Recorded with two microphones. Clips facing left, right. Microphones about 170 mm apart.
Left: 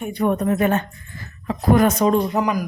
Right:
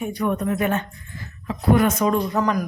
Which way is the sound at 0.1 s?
35° left (ahead or behind).